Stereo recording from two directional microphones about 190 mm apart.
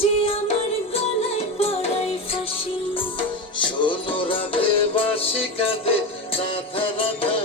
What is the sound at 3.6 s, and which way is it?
Music, 25° left (ahead or behind).